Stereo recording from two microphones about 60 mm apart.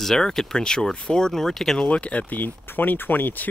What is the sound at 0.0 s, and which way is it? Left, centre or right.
Speech, centre.